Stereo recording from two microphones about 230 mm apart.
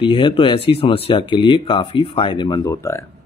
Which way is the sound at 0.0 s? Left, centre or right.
Left.